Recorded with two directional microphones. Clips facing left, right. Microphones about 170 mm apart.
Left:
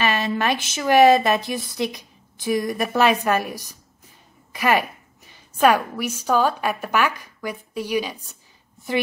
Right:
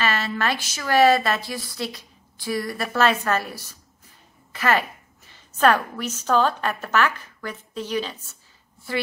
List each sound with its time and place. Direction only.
0.0 s a woman's voice: 15° left (ahead or behind)